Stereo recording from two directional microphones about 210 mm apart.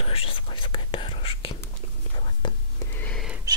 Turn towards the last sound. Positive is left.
turn(degrees=5)  # may be behind; listen again after turning